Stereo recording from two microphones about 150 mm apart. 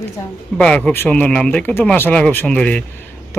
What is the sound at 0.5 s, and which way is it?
Speech, 5° left (ahead or behind).